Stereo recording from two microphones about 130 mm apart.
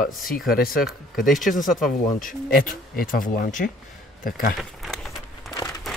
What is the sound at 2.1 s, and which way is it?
Speech, 90° left.